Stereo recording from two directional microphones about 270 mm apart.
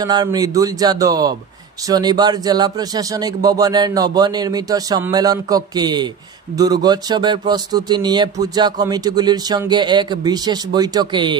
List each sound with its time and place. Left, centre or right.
0.0 s speech: centre